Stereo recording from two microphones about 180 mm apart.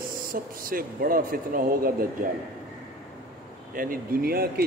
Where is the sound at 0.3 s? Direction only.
55° right (ahead or behind).